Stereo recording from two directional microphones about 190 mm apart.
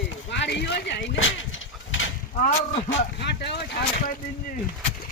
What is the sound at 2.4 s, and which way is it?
Speech, 40° left (ahead or behind).